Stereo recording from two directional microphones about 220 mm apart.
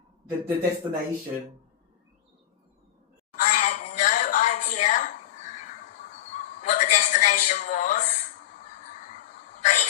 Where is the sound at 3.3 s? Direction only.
35° left (ahead or behind).